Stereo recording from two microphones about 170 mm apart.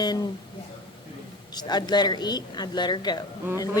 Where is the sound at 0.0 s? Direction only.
25° left (ahead or behind).